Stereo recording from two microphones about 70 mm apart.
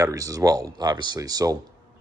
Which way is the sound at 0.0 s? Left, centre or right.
Right.